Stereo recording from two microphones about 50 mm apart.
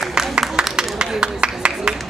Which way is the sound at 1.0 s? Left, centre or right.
Centre.